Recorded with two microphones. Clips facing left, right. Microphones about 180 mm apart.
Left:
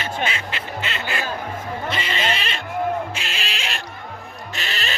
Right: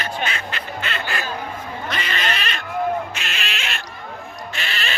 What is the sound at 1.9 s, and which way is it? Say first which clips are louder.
Cat: left 1 dB; 25° left (ahead or behind).